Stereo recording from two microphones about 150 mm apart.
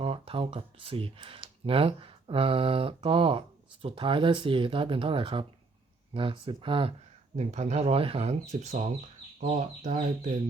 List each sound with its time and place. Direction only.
0.0 s speech: 40° right (ahead or behind)
7.3 s speech: 45° right (ahead or behind)